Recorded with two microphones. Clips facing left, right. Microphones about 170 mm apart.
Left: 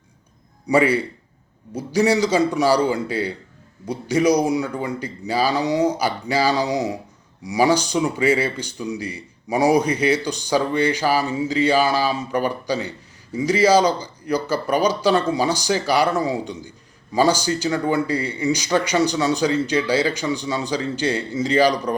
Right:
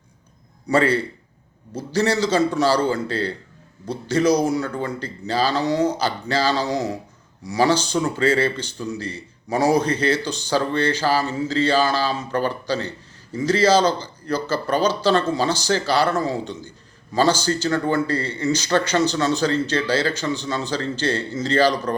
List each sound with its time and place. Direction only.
0.7 s speech: 15° left (ahead or behind)